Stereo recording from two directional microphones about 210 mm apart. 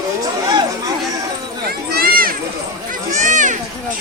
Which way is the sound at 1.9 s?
45° right (ahead or behind).